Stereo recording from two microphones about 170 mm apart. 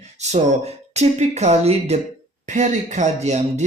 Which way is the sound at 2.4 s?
45° right (ahead or behind).